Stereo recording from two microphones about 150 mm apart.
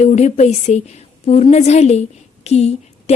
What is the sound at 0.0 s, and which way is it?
A woman's voice, 50° left (ahead or behind).